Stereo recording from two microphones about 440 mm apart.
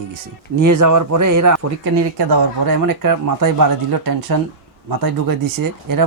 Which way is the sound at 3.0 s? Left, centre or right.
Right.